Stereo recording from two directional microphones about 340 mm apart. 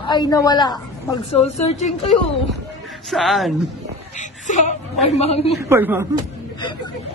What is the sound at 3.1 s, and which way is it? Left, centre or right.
Speech, centre.